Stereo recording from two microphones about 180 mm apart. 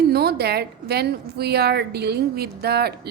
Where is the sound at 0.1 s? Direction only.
60° right (ahead or behind).